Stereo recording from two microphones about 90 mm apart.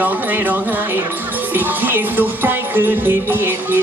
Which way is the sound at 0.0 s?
20° right (ahead or behind).